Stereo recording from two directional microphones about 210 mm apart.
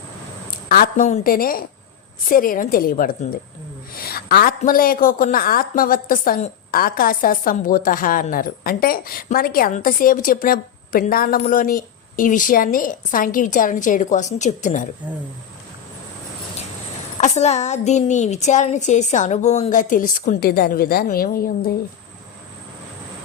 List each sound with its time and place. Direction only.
0.5 s a woman's voice: 45° left (ahead or behind)
17.2 s a woman's voice: 35° left (ahead or behind)